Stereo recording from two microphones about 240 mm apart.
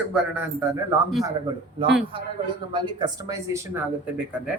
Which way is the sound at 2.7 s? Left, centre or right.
Centre.